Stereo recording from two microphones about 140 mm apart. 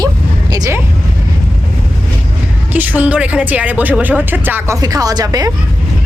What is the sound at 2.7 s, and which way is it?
Speech, 10° right (ahead or behind).